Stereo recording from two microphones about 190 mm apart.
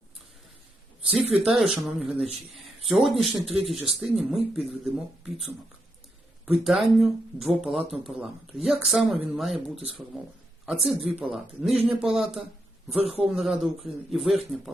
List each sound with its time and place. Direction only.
1.3 s speech: 5° right (ahead or behind)
6.4 s speech: centre (ahead or behind)
13.0 s a man's voice: 30° right (ahead or behind)
13.2 s speech: 5° right (ahead or behind)